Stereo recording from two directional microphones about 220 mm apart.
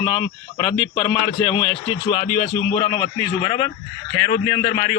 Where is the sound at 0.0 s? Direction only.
25° left (ahead or behind).